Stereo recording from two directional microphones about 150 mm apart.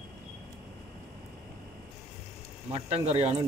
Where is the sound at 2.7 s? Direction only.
45° right (ahead or behind).